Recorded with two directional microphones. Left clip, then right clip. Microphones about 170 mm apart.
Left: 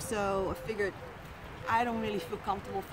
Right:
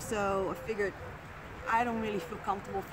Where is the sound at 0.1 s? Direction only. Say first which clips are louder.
Even; 5° right (ahead or behind).